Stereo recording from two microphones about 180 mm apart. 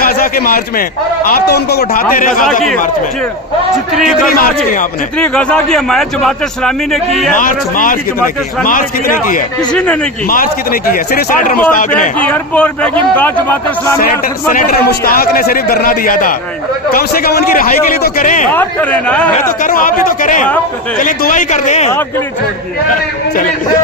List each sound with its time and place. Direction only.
0.0 s a man's voice: 55° left (ahead or behind)
3.9 s a man's voice: centre (ahead or behind)
4.3 s a man's voice: 50° left (ahead or behind)
5.1 s a man's voice: 5° left (ahead or behind)
7.3 s a man's voice: 50° left (ahead or behind)
9.6 s a man's voice: 5° left (ahead or behind)
10.2 s a man's voice: 50° left (ahead or behind)
12.2 s speech: 10° left (ahead or behind)
14.5 s a man's voice: 50° left (ahead or behind)
18.5 s speech: 10° left (ahead or behind)
19.6 s a man's voice: 50° left (ahead or behind)